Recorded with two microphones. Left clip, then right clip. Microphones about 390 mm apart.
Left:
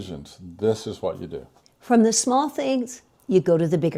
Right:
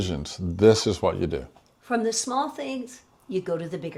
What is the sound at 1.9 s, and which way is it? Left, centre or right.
A woman's voice, left.